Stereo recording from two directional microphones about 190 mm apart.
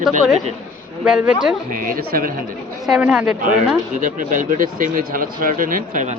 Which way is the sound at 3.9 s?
45° right (ahead or behind).